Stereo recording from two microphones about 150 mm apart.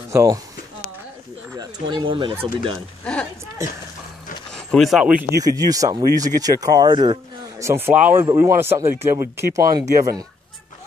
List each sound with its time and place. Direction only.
0.1 s speech: 20° right (ahead or behind)
1.6 s speech: 30° right (ahead or behind)
3.0 s speech: 5° left (ahead or behind)
4.6 s speech: centre (ahead or behind)
5.4 s speech: 25° right (ahead or behind)
7.5 s speech: 15° right (ahead or behind)